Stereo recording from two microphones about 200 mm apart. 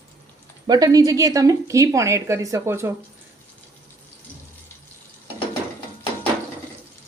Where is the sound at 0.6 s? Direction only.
20° right (ahead or behind).